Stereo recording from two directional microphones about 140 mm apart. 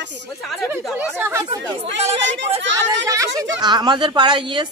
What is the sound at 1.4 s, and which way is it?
Speech, 45° right (ahead or behind).